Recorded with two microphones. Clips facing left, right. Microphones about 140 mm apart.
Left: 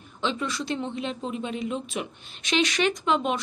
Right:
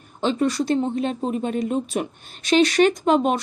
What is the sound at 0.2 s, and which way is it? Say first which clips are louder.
Speech: right 8 dB; 45° right (ahead or behind).